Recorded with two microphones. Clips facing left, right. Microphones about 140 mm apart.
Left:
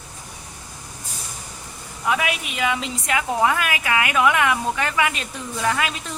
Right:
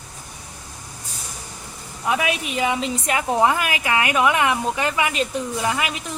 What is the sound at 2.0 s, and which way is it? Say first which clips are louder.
A woman's voice: right 1 dB; 30° right (ahead or behind).